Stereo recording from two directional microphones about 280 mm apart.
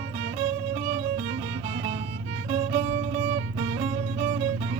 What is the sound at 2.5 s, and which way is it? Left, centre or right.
Music, right.